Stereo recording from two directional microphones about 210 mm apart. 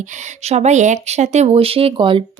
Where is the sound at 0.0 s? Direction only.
35° right (ahead or behind).